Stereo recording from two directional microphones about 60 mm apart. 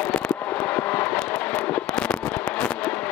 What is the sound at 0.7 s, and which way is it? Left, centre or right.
Vehicle, left.